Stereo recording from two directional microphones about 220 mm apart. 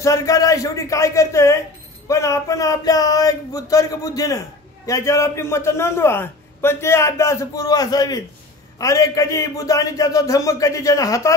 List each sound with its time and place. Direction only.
0.0 s a man's voice: 15° left (ahead or behind)